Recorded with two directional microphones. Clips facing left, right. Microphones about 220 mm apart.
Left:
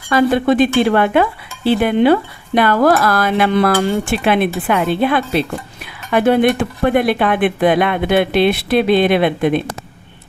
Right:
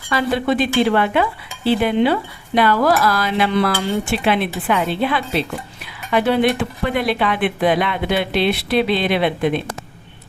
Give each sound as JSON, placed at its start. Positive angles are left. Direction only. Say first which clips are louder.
{"t": 0.1, "sound": "speech", "louder": "left 5 dB", "side_deg": 50}